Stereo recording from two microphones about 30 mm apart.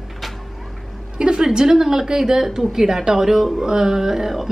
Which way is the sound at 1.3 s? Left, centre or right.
Right.